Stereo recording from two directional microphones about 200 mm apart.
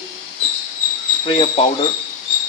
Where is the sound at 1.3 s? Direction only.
25° left (ahead or behind).